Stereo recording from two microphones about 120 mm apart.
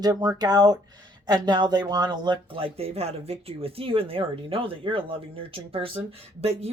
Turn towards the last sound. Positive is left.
turn(degrees=-60)  # may be behind; listen again after turning